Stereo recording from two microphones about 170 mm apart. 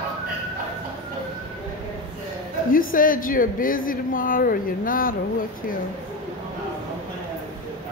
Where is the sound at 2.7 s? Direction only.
55° left (ahead or behind).